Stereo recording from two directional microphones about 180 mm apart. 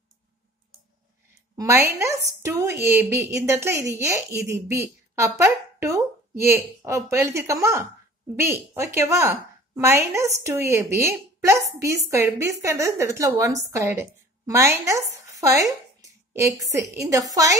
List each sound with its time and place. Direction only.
1.6 s a woman's voice: 15° right (ahead or behind)